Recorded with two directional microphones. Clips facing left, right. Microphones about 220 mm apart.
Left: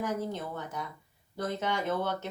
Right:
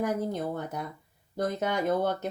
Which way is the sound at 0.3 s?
40° right (ahead or behind).